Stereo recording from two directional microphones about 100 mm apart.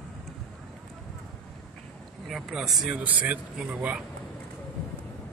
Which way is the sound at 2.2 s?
5° right (ahead or behind).